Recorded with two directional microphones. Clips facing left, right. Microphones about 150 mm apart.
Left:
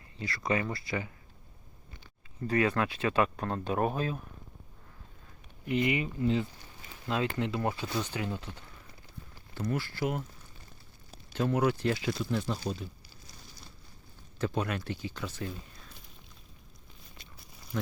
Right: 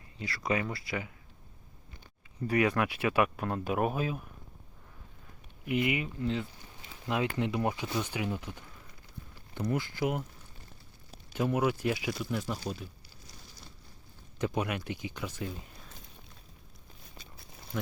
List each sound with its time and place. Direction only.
0.2 s speech: 10° right (ahead or behind)
2.5 s speech: 15° right (ahead or behind)
5.6 s speech: 10° right (ahead or behind)
6.8 s speech: 15° right (ahead or behind)
11.3 s speech: 10° right (ahead or behind)
14.3 s speech: 15° right (ahead or behind)